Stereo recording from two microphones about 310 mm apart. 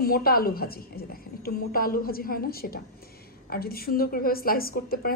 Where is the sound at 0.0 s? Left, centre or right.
Left.